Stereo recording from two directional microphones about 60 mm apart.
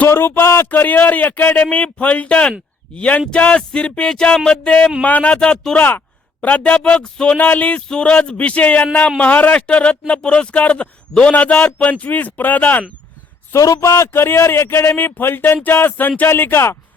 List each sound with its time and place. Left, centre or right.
0.1 s a man's voice: left
3.6 s music: centre
5.0 s a man's voice: left
7.3 s a man's voice: left
7.8 s a man's voice: centre
13.5 s a man's voice: left
13.9 s speech: left
16.3 s speech: left